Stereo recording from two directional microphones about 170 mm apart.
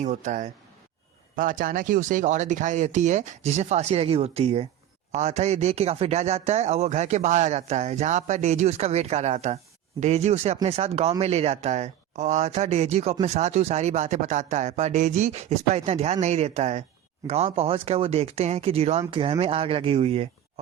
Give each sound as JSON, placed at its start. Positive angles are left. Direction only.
{"t": 0.0, "sound": "a man's voice", "side_deg": -45}